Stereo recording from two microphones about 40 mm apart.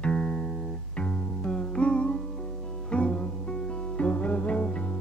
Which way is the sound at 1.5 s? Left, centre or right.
Left.